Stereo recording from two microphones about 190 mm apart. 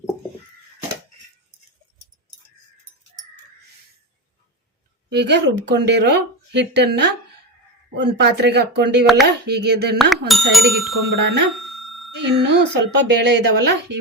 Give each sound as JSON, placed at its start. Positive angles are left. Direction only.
{"t": 5.1, "sound": "speech", "side_deg": -65}
{"t": 10.2, "sound": "speech", "side_deg": 0}
{"t": 11.6, "sound": "bicycle bell", "side_deg": 0}
{"t": 12.1, "sound": "speech", "side_deg": -65}